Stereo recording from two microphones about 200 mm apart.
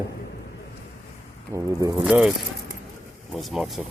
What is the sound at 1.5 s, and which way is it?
Speech, 15° right (ahead or behind).